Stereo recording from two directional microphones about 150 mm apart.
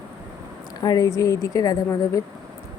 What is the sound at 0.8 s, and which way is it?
Speech, 25° left (ahead or behind).